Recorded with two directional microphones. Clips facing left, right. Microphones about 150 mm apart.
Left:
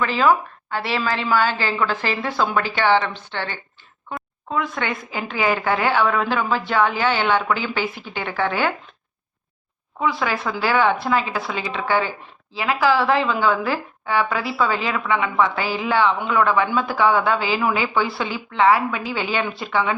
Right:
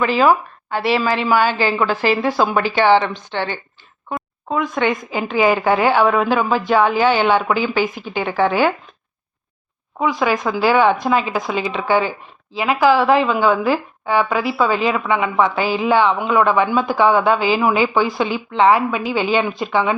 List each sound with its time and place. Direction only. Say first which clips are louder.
0.0 s a woman's voice: right 3 dB; 15° right (ahead or behind)
10.0 s a woman's voice: right 4 dB; 15° right (ahead or behind)